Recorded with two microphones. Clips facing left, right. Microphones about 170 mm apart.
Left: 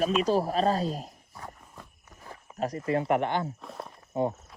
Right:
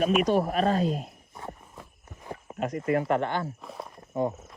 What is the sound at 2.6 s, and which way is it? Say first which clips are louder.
Speech: right 1 dB; 35° left (ahead or behind).